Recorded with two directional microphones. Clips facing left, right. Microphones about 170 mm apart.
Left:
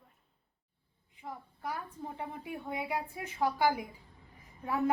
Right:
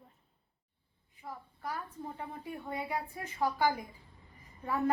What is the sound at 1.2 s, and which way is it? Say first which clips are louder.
A woman's voice: left 1 dB; 15° left (ahead or behind).